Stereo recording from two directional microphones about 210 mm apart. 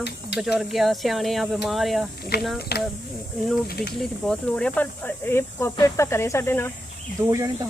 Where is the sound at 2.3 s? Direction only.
50° left (ahead or behind).